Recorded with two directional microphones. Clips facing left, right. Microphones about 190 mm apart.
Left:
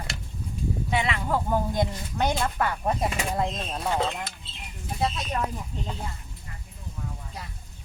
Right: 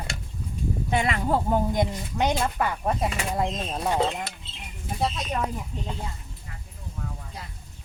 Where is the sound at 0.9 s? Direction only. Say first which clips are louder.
Right 2 dB; 45° right (ahead or behind).